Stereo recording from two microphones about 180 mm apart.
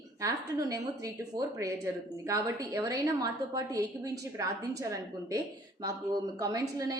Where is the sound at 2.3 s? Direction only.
15° right (ahead or behind).